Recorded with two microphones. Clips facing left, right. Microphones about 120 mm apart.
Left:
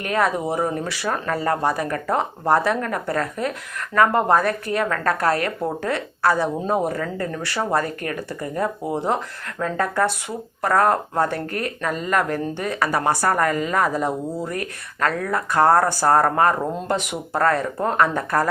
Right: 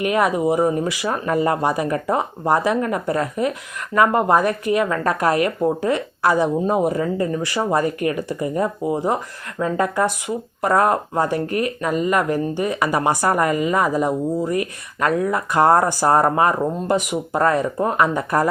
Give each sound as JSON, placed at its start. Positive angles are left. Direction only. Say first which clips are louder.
{"t": 0.0, "sound": "speech", "louder": "right 3 dB", "side_deg": -15}